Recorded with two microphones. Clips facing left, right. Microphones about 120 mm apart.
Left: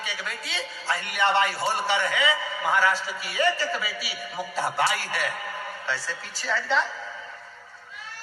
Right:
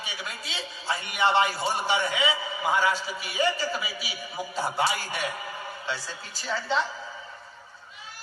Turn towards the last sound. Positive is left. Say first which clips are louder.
# left 2 dB
turn(degrees=-20)  # may be behind; listen again after turning